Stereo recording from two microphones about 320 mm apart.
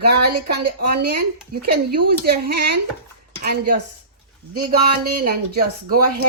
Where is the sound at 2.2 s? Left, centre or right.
Right.